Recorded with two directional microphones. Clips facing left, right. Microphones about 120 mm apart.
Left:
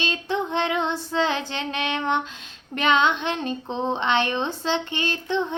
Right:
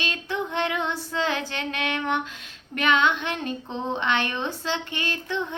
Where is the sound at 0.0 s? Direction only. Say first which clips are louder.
Left 3 dB; 25° left (ahead or behind).